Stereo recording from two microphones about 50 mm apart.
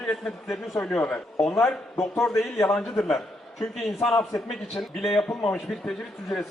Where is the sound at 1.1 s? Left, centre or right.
Centre.